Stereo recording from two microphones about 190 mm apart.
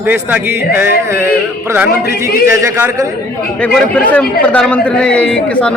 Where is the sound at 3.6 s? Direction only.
5° left (ahead or behind).